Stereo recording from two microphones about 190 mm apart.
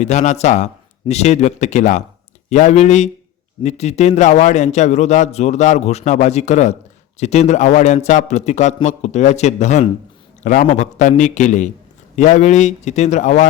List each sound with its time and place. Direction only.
0.0 s a man's voice: 40° left (ahead or behind)